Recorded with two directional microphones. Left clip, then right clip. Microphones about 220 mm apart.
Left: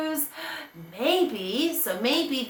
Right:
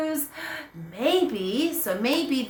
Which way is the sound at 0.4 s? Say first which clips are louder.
Right 1 dB; 15° right (ahead or behind).